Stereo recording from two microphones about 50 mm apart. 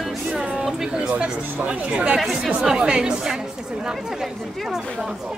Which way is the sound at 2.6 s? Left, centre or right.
Centre.